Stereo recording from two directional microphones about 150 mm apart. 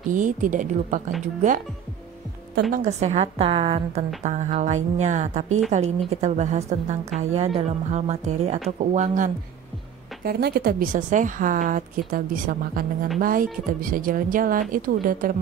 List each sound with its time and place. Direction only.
0.1 s a woman's voice: 60° right (ahead or behind)
2.7 s speech: 50° right (ahead or behind)
4.2 s a woman's voice: 50° right (ahead or behind)
10.2 s a woman's voice: 90° right; by 15.3 s 65° right (ahead or behind)